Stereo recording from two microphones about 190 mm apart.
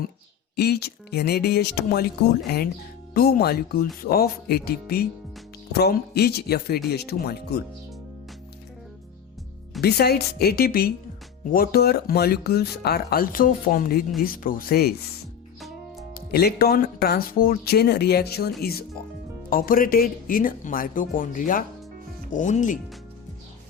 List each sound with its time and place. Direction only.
0.5 s speech: 55° left (ahead or behind)
3.2 s speech: 55° left (ahead or behind)
9.8 s speech: 55° left (ahead or behind)
16.1 s speech: 55° left (ahead or behind)